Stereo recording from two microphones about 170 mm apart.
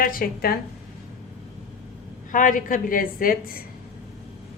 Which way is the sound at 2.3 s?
50° left (ahead or behind).